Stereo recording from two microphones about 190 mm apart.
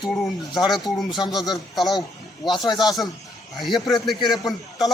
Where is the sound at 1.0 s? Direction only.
25° left (ahead or behind).